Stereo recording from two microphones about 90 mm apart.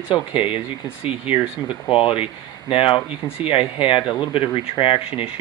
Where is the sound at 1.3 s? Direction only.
90° left.